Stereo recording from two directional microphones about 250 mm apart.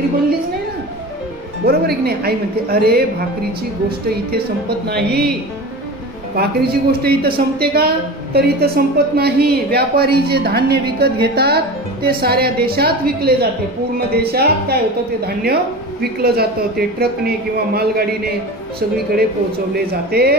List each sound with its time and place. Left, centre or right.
1.7 s a woman's voice: right
6.3 s a woman's voice: right
19.7 s a woman's voice: right